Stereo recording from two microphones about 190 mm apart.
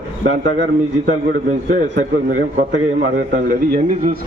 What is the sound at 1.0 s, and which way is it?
Speech, 40° right (ahead or behind).